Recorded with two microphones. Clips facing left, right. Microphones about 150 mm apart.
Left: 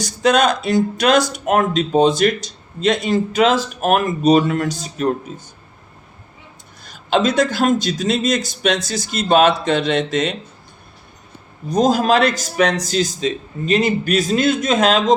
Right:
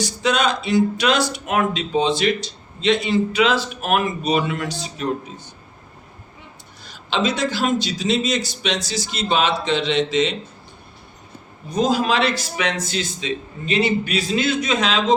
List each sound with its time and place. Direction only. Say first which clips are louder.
0.0 s speech: left 5 dB; 45° left (ahead or behind)
6.8 s speech: left 5 dB; 50° left (ahead or behind)
11.7 s speech: left 4 dB; 40° left (ahead or behind)